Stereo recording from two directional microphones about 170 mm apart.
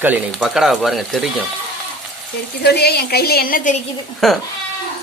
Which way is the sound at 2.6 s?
70° left (ahead or behind).